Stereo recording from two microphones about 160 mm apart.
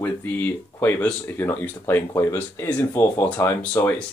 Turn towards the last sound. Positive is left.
turn(degrees=15)  # may be behind; listen again after turning